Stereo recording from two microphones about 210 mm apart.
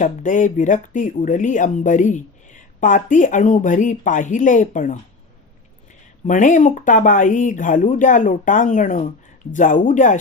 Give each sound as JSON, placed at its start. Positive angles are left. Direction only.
{"t": 0.0, "sound": "speech", "side_deg": 40}
{"t": 6.2, "sound": "speech", "side_deg": 35}